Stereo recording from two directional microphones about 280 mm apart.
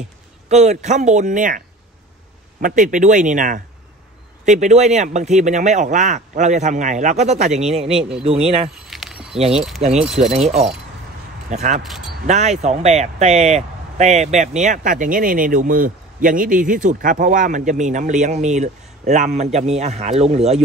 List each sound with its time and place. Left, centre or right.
0.5 s speech: right
2.6 s speech: right
8.8 s a sound: centre
9.8 s speech: right
11.5 s speech: right
11.8 s speech: centre
12.3 s speech: right